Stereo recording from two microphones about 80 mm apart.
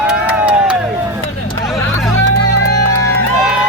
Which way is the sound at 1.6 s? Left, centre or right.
Centre.